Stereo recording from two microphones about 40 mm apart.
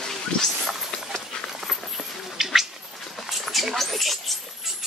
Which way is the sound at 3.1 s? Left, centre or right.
Centre.